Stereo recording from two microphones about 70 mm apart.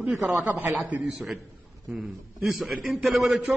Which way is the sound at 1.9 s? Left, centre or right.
Centre.